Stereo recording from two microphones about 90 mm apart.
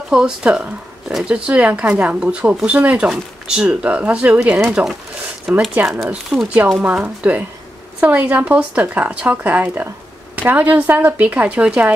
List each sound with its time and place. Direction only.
0.1 s speech: 10° right (ahead or behind)
5.5 s speech: 5° right (ahead or behind)
6.8 s speech: 15° right (ahead or behind)